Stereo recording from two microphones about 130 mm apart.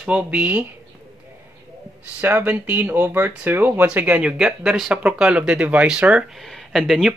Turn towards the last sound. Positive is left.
turn(degrees=0)  # may be behind; listen again after turning